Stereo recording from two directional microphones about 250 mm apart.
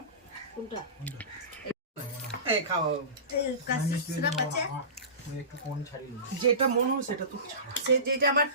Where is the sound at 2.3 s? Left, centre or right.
Left.